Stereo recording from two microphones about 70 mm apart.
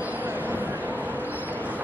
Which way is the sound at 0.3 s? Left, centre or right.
Right.